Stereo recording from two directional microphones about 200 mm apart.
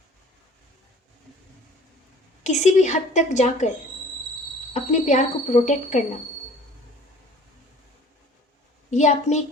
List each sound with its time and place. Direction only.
2.4 s a woman's voice: 35° left (ahead or behind)
4.7 s a woman's voice: 35° left (ahead or behind)
8.9 s a woman's voice: 35° left (ahead or behind)